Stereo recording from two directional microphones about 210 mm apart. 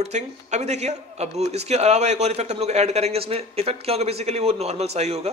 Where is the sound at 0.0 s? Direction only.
30° right (ahead or behind).